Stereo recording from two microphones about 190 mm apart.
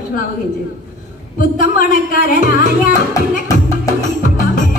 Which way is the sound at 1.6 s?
45° left (ahead or behind).